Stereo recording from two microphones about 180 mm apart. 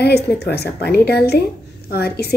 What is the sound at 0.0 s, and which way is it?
A woman's voice, 65° left (ahead or behind).